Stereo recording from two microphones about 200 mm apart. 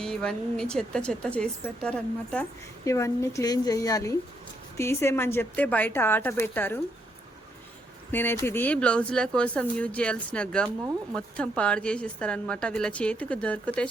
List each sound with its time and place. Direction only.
0.0 s a woman's voice: 5° left (ahead or behind)
8.1 s a woman's voice: 10° left (ahead or behind)